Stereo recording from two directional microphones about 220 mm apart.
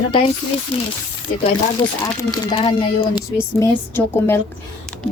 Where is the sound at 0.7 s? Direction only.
25° left (ahead or behind).